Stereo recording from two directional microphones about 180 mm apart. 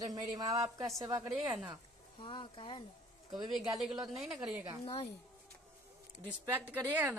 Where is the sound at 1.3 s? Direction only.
5° right (ahead or behind).